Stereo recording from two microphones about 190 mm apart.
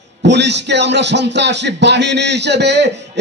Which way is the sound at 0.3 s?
65° right (ahead or behind).